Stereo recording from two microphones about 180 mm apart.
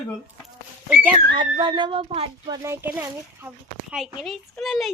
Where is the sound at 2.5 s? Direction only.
15° right (ahead or behind).